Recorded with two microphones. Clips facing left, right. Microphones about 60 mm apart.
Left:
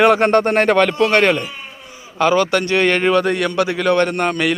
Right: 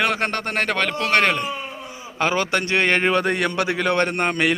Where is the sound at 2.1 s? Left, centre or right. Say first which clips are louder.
Left 6 dB; centre.